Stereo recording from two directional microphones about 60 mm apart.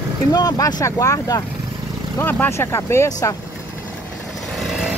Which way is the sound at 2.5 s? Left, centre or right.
Left.